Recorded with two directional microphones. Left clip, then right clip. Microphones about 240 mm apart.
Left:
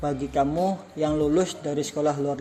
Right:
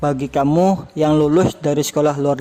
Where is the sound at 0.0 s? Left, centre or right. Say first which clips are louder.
Right 7 dB; right.